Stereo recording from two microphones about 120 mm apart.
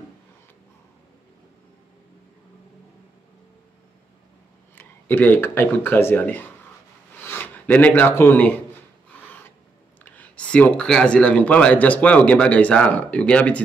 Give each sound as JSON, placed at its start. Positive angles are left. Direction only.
{"t": 4.7, "sound": "speech", "side_deg": 15}
{"t": 10.0, "sound": "speech", "side_deg": 15}